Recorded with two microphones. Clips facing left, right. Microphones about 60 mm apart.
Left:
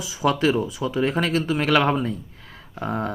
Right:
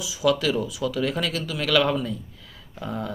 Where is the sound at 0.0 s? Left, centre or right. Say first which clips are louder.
Left 2 dB; left.